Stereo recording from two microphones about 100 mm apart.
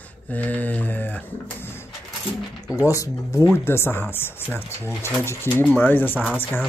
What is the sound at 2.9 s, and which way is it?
Speech, 30° left (ahead or behind).